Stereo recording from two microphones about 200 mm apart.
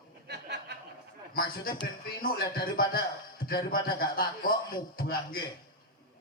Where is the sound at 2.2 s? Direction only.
45° left (ahead or behind).